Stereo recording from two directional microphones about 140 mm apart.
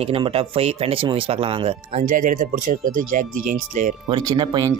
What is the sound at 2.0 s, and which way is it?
Speech, 70° right (ahead or behind).